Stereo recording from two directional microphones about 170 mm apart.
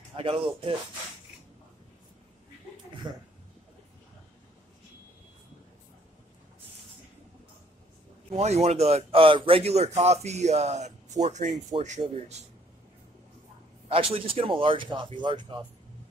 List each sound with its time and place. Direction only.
0.1 s a man's voice: 30° right (ahead or behind)
3.1 s speech: 25° right (ahead or behind)
8.3 s a man's voice: 40° right (ahead or behind)
13.8 s a man's voice: 35° right (ahead or behind)